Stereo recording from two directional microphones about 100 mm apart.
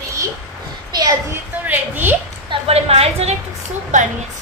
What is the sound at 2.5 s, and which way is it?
Speech, 90° right.